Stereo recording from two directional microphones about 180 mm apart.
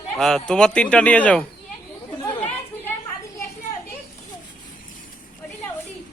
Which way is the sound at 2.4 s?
10° left (ahead or behind).